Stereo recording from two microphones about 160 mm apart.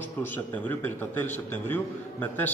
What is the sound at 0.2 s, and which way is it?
A man's voice, 10° left (ahead or behind).